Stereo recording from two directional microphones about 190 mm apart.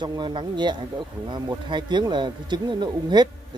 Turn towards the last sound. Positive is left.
turn(degrees=-20)  # may be behind; listen again after turning